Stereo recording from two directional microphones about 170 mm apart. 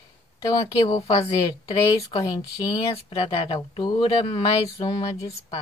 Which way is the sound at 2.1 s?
20° left (ahead or behind).